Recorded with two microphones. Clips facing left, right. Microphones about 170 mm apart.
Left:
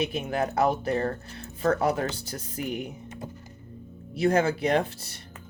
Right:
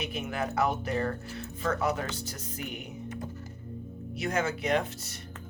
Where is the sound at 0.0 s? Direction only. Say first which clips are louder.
Left 6 dB; 30° left (ahead or behind).